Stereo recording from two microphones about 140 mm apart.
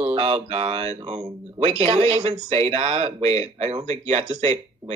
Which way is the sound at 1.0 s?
55° right (ahead or behind).